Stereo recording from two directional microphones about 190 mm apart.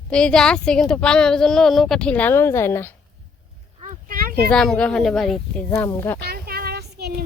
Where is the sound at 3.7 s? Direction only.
45° right (ahead or behind).